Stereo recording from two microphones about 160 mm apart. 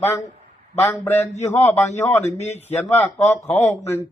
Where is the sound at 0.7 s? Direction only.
20° left (ahead or behind).